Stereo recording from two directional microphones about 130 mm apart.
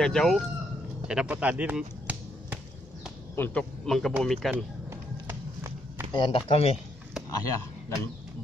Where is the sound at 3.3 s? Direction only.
15° left (ahead or behind).